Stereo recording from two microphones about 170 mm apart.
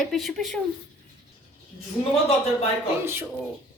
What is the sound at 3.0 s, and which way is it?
Speech, 15° right (ahead or behind).